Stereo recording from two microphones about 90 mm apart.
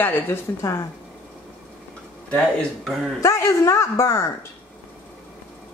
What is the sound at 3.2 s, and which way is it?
Speech, 35° left (ahead or behind).